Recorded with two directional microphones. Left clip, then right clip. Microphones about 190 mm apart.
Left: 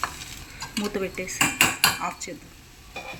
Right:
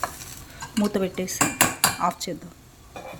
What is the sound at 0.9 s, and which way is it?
Speech, 45° right (ahead or behind).